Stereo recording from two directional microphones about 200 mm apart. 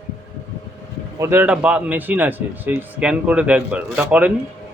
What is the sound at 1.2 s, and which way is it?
Speech, 10° right (ahead or behind).